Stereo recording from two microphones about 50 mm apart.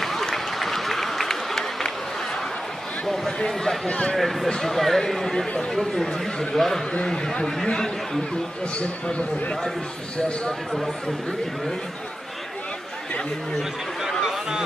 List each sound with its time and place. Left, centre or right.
0.0 s a sound: centre
3.3 s speech: centre
3.8 s a man's voice: centre
4.2 s speech: centre
6.9 s a man's voice: centre
14.2 s a sound: centre